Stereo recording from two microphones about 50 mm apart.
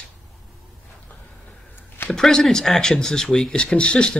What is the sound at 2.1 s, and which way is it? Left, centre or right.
Speech, centre.